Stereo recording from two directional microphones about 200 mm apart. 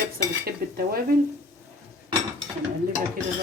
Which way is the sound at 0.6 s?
50° right (ahead or behind).